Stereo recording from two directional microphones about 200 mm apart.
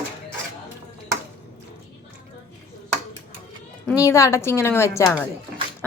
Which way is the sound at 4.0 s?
15° left (ahead or behind).